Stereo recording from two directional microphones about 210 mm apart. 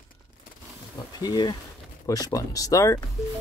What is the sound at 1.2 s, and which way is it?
Speech, 20° left (ahead or behind).